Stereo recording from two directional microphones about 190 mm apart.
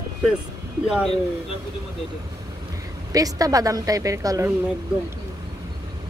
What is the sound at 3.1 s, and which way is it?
A woman's voice, 20° right (ahead or behind).